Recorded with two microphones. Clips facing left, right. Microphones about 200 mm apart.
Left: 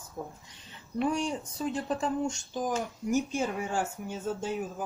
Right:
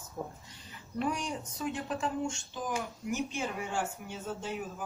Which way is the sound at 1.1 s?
30° left (ahead or behind).